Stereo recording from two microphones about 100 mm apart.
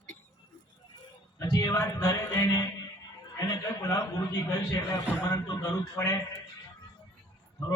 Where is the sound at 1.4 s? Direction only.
35° left (ahead or behind).